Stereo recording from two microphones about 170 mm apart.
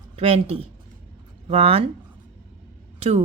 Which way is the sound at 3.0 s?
40° right (ahead or behind).